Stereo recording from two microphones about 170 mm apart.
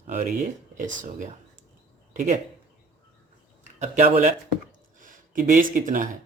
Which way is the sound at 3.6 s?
45° right (ahead or behind).